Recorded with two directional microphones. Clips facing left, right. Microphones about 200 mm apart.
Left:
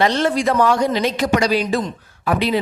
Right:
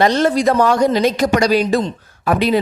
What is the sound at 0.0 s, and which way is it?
A man's voice, 40° right (ahead or behind).